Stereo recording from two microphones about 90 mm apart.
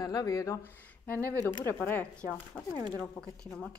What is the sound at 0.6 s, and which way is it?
Speech, 25° left (ahead or behind).